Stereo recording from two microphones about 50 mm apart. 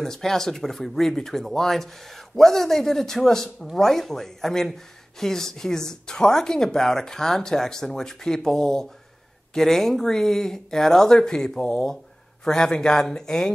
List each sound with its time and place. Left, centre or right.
0.0 s speech: centre